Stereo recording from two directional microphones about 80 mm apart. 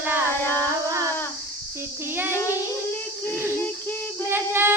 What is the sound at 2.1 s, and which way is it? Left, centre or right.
Child singing, right.